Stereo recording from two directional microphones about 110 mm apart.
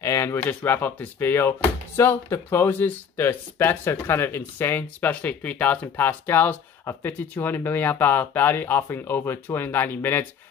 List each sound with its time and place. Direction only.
0.0 s speech: 25° left (ahead or behind)